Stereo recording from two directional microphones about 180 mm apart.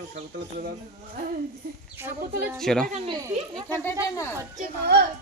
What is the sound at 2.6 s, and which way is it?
Speech, centre (ahead or behind).